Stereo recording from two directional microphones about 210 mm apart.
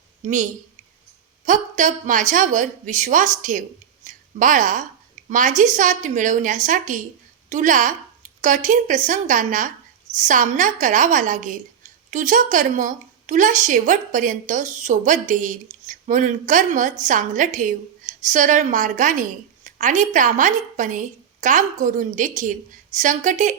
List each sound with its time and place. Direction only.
0.2 s a woman's voice: 35° right (ahead or behind)